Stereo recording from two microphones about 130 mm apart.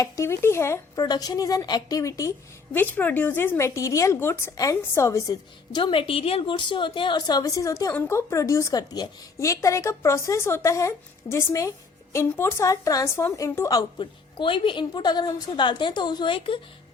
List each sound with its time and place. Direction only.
0.0 s speech: 20° left (ahead or behind)
2.7 s speech: 15° left (ahead or behind)
14.0 s a woman's voice: 40° left (ahead or behind)